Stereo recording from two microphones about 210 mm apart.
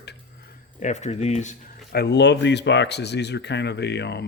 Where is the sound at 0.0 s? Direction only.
50° left (ahead or behind).